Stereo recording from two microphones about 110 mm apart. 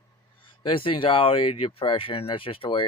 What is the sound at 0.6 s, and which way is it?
Speech, 55° left (ahead or behind).